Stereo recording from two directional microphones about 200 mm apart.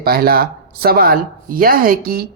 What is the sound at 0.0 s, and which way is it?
Speech, 50° right (ahead or behind).